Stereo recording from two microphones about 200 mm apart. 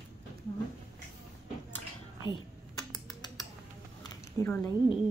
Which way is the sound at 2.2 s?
20° left (ahead or behind).